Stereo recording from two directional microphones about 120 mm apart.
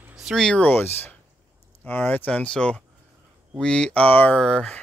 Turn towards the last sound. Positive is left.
turn(degrees=5)  # may be behind; listen again after turning